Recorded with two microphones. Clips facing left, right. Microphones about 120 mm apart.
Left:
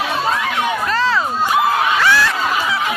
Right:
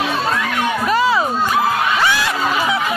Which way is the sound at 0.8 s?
15° right (ahead or behind).